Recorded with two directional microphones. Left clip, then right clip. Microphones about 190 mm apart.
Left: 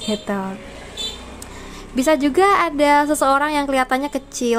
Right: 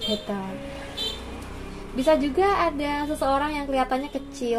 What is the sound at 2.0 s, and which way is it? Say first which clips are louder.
Speech: left 5 dB; 40° left (ahead or behind).